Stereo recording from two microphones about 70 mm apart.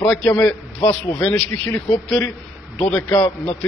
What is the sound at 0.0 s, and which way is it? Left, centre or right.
Speech, centre.